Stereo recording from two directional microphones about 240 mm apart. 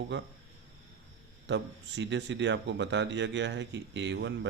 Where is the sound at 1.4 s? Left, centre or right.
Right.